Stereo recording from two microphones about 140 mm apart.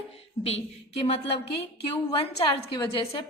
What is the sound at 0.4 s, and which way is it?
A woman's voice, 45° left (ahead or behind).